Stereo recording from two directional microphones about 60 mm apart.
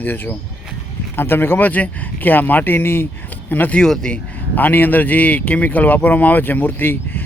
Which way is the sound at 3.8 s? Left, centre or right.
Centre.